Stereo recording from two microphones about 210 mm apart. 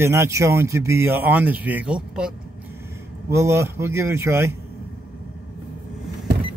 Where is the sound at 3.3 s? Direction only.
10° right (ahead or behind).